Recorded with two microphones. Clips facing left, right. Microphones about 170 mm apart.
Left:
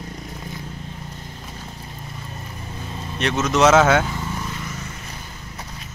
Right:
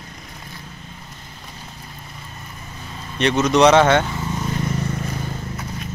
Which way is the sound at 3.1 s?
Centre (ahead or behind).